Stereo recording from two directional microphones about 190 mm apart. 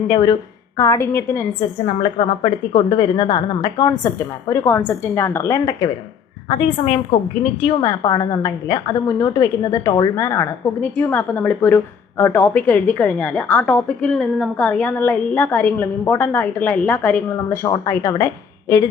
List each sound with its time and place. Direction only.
0.1 s a woman's voice: 25° left (ahead or behind)
2.0 s a woman's voice: 30° left (ahead or behind)